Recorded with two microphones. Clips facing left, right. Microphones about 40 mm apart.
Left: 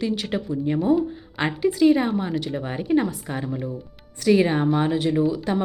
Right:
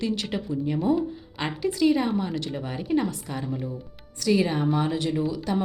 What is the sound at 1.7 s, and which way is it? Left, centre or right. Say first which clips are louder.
A woman's voice: left 3 dB; centre.